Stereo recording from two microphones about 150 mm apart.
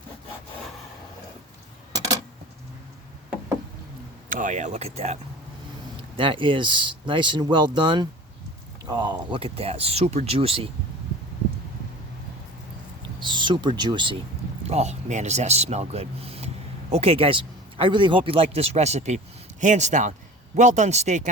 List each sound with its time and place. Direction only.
4.3 s speech: 60° right (ahead or behind)
6.1 s speech: 35° right (ahead or behind)
13.1 s speech: 30° right (ahead or behind)
14.7 s speech: 45° right (ahead or behind)